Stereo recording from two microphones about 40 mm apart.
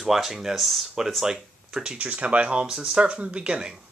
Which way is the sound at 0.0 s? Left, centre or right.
Centre.